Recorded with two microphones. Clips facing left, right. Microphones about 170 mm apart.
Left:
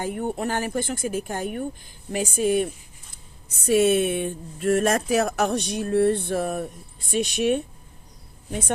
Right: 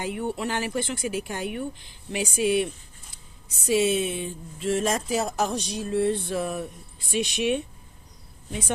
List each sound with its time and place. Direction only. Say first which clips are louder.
0.0 s speech: left 2 dB; 45° left (ahead or behind)
3.5 s a woman's voice: left 4 dB; 55° left (ahead or behind)